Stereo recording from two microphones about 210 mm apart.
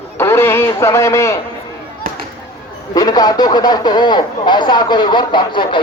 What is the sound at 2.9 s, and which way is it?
Speech, 20° left (ahead or behind).